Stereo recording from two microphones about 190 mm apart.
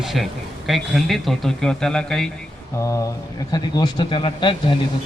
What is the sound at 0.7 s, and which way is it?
Speech, centre (ahead or behind).